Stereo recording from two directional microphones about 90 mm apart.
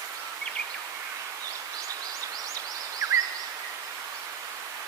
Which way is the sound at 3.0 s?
40° right (ahead or behind).